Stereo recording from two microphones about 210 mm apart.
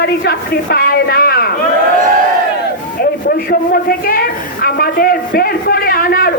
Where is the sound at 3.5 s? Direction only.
45° left (ahead or behind).